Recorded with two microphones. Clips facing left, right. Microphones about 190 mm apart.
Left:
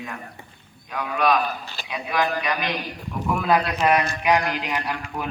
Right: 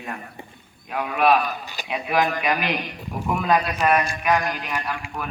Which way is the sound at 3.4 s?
10° left (ahead or behind).